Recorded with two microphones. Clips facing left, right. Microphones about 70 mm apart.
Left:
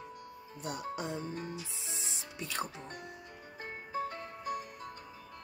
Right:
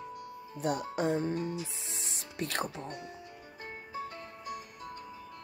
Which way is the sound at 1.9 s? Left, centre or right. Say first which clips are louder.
Even; right.